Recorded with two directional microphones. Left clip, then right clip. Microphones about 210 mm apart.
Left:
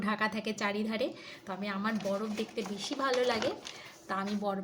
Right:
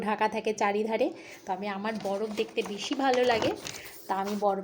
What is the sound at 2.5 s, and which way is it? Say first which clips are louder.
Speech: right 5 dB; 35° left (ahead or behind).